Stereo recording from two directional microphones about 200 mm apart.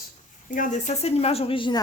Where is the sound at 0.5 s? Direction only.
35° left (ahead or behind).